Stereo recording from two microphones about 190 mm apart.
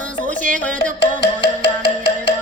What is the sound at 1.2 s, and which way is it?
Music, 30° left (ahead or behind).